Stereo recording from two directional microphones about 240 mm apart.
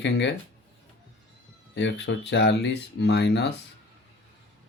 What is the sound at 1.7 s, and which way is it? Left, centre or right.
Speech, left.